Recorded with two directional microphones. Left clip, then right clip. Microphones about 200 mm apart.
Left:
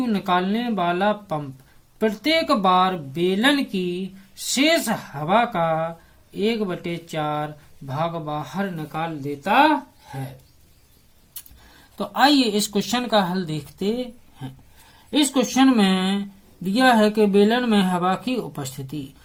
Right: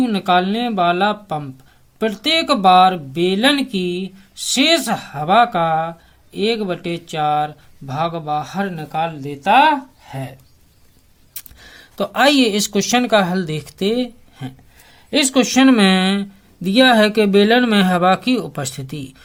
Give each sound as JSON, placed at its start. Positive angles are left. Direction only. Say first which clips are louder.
{"t": 0.0, "sound": "speech", "louder": "right 6 dB", "side_deg": -30}
{"t": 11.9, "sound": "speech", "louder": "right 4 dB", "side_deg": -40}